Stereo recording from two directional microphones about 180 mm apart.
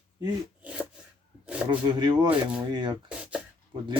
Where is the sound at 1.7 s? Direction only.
25° right (ahead or behind).